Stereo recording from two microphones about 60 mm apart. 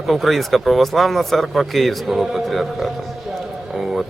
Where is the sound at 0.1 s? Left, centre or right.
Centre.